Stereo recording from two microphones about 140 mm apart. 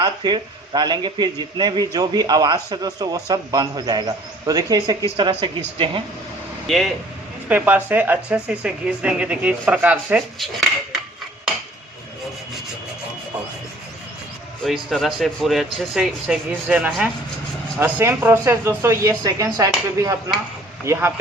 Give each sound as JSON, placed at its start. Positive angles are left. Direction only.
{"t": 0.0, "sound": "a man's voice", "side_deg": -30}
{"t": 6.7, "sound": "speech", "side_deg": 0}
{"t": 7.4, "sound": "speech", "side_deg": -10}
{"t": 10.3, "sound": "speech", "side_deg": 0}
{"t": 14.6, "sound": "a man's voice", "side_deg": 0}